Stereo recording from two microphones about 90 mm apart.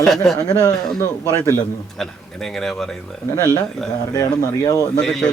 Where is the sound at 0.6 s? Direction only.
35° left (ahead or behind).